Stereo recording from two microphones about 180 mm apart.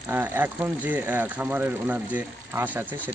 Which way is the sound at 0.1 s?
10° right (ahead or behind).